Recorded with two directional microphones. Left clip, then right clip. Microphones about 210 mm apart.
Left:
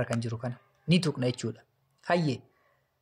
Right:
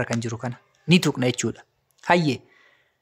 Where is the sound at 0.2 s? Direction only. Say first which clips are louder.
Right 6 dB; 30° right (ahead or behind).